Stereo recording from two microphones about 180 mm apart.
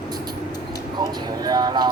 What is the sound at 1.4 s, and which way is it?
Music, 20° right (ahead or behind).